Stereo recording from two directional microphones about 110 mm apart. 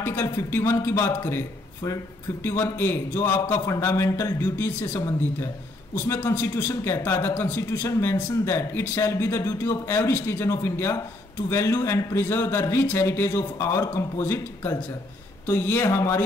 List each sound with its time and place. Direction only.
0.0 s speech: 20° left (ahead or behind)